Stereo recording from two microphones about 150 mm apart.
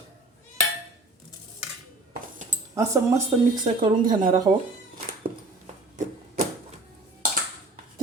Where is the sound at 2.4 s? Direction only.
55° right (ahead or behind).